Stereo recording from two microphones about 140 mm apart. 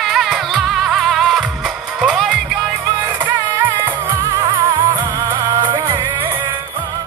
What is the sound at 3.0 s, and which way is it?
Music, 20° right (ahead or behind).